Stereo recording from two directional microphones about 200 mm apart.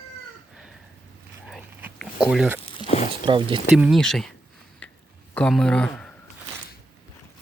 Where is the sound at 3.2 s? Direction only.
25° right (ahead or behind).